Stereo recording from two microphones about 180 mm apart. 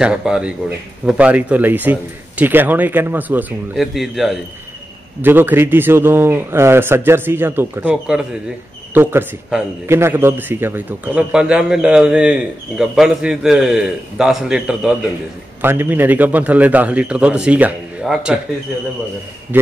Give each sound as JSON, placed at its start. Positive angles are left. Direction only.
{"t": 0.0, "sound": "speech", "side_deg": -5}
{"t": 5.2, "sound": "a man's voice", "side_deg": -10}
{"t": 19.5, "sound": "speech", "side_deg": -10}